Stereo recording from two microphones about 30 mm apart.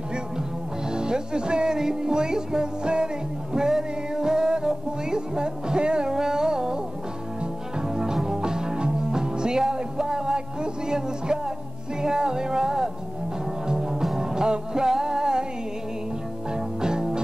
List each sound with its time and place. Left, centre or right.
0.8 s speech: right
3.5 s music: right
6.1 s music: right
7.9 s music: centre
12.0 s speech: right
13.7 s music: centre
16.5 s music: right